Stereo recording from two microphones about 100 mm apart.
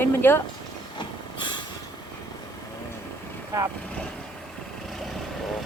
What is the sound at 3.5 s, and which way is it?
Speech, 35° right (ahead or behind).